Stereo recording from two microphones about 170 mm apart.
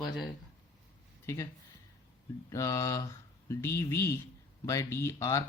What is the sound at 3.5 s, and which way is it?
Speech, 15° left (ahead or behind).